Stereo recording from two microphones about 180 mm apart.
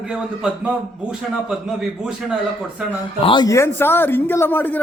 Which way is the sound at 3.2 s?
25° left (ahead or behind).